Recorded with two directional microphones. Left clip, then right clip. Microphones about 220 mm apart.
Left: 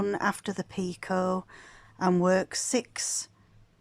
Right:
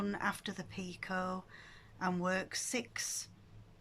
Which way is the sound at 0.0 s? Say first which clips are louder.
Left 9 dB; 30° left (ahead or behind).